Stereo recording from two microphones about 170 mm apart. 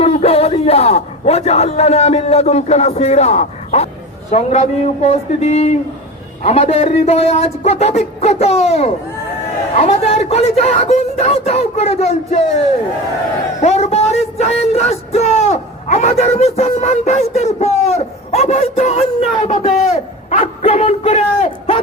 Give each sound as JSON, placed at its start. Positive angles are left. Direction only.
{"t": 0.0, "sound": "a man's voice", "side_deg": 35}
{"t": 13.6, "sound": "a man's voice", "side_deg": 40}